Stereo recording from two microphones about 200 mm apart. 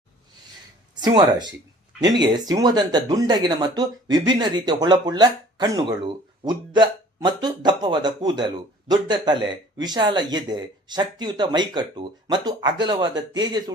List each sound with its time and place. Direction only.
1.0 s speech: 20° right (ahead or behind)